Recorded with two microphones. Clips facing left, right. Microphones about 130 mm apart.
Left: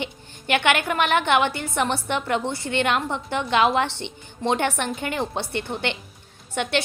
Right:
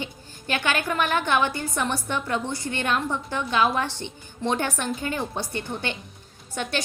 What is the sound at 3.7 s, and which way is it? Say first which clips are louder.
Speech: left 4 dB; 65° left (ahead or behind).